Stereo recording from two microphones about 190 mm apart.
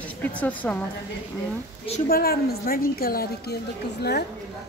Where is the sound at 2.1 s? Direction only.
55° left (ahead or behind).